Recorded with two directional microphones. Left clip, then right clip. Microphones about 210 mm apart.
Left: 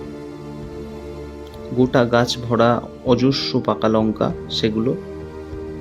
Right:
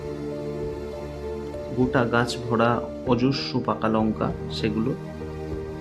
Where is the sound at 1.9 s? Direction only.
20° left (ahead or behind).